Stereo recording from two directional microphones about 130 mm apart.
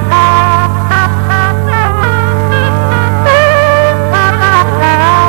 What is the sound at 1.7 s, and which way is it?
Music, 30° right (ahead or behind).